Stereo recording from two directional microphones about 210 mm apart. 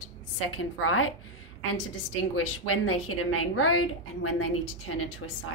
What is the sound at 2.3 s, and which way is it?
A woman's voice, 85° left.